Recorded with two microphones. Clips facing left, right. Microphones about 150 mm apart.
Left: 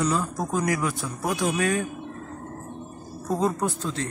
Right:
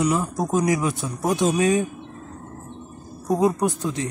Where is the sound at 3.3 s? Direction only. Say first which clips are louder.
Right 5 dB; 15° right (ahead or behind).